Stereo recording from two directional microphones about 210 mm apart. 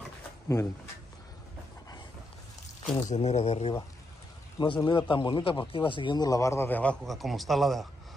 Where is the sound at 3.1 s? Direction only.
30° left (ahead or behind).